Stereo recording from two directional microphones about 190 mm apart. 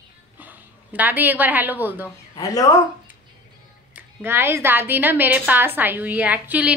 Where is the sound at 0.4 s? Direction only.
10° right (ahead or behind).